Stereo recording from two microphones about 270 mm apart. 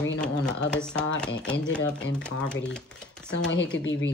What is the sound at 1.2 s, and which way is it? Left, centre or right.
Speech, centre.